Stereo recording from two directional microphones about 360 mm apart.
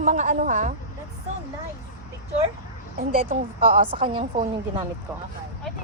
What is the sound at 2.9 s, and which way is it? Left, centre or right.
A woman's voice, centre.